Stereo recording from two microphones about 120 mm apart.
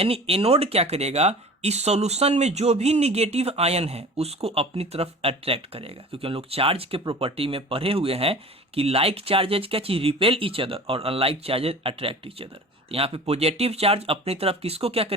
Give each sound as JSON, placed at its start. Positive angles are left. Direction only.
{"t": 0.0, "sound": "speech", "side_deg": -55}